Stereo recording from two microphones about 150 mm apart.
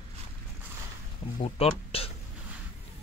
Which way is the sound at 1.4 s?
40° left (ahead or behind).